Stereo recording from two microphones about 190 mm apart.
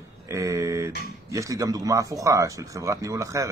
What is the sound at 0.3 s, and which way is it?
Speech, 15° right (ahead or behind).